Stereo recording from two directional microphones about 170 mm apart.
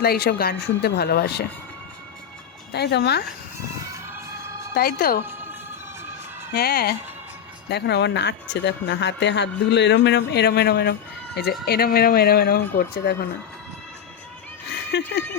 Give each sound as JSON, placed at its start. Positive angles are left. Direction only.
{"t": 0.0, "sound": "speech", "side_deg": 65}
{"t": 2.7, "sound": "speech", "side_deg": 75}
{"t": 4.7, "sound": "speech", "side_deg": 60}
{"t": 6.5, "sound": "speech", "side_deg": 65}
{"t": 7.7, "sound": "speech", "side_deg": 80}
{"t": 14.9, "sound": "speech", "side_deg": 90}